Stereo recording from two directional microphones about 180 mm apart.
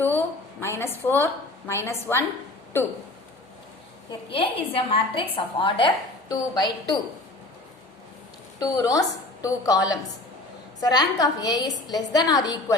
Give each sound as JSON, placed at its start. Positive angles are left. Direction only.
{"t": 0.6, "sound": "a woman's voice", "side_deg": 15}
{"t": 4.3, "sound": "a woman's voice", "side_deg": 30}
{"t": 8.5, "sound": "a woman's voice", "side_deg": 20}